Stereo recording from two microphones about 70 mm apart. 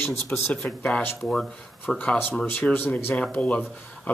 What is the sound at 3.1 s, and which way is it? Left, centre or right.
Speech, centre.